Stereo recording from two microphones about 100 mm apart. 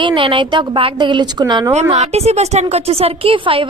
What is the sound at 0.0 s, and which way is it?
A woman's voice, 55° right (ahead or behind).